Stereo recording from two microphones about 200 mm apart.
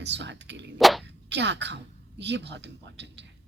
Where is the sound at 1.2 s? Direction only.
60° right (ahead or behind).